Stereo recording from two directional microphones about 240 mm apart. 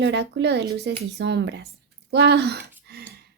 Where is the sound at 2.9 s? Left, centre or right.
Right.